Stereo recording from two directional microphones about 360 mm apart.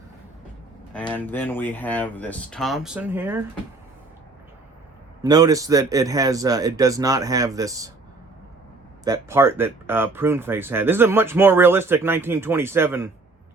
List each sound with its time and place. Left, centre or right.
0.9 s speech: centre
5.2 s speech: centre
9.0 s speech: centre